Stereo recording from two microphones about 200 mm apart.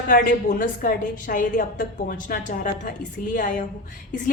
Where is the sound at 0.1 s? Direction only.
45° left (ahead or behind).